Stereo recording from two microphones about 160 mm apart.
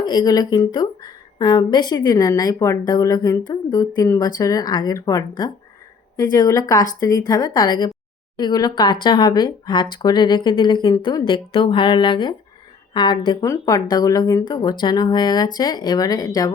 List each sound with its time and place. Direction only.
0.0 s speech: 25° left (ahead or behind)